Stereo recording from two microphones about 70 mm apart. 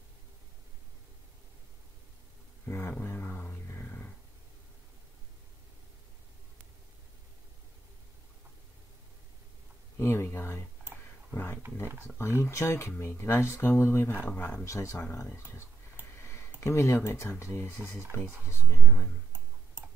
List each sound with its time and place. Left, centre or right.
2.6 s a sound: left
9.9 s speech: left
14.1 s speech: left
14.6 s speech: left
16.2 s a sound: left
16.6 s speech: left